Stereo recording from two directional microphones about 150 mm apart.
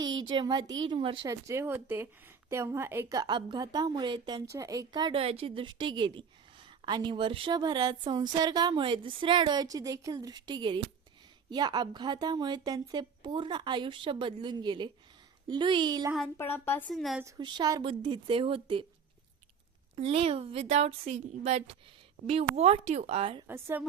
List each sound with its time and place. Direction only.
0.0 s a woman's voice: 30° right (ahead or behind)
1.3 s a woman's voice: 20° right (ahead or behind)
4.4 s a woman's voice: 20° right (ahead or behind)
5.2 s a woman's voice: 40° right (ahead or behind)
16.4 s a woman's voice: 15° left (ahead or behind)
16.9 s a woman's voice: centre (ahead or behind)
17.3 s a woman's voice: 25° right (ahead or behind)
20.0 s a woman's voice: 40° right (ahead or behind)
23.5 s a woman's voice: 15° right (ahead or behind)